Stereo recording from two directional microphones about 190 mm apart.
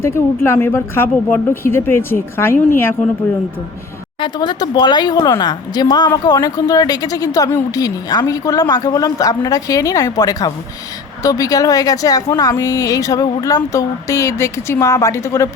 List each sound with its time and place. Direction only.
0.4 s a woman's voice: 10° left (ahead or behind)
4.2 s a woman's voice: 25° left (ahead or behind)